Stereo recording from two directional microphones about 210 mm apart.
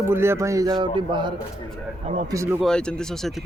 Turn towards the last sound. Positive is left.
turn(degrees=5)  # may be behind; listen again after turning